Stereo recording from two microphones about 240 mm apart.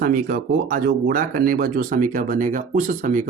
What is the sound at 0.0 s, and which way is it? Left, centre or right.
Speech, right.